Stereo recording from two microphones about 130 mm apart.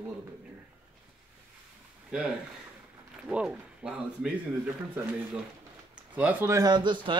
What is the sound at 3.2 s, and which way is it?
Speech, 10° right (ahead or behind).